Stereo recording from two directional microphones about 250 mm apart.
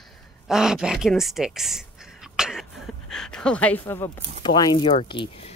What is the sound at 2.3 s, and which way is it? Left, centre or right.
Cough, centre.